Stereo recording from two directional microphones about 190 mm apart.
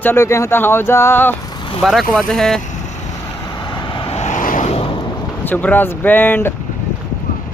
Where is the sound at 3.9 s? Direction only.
35° left (ahead or behind).